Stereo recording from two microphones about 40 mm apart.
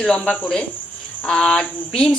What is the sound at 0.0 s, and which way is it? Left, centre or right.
Speech, left.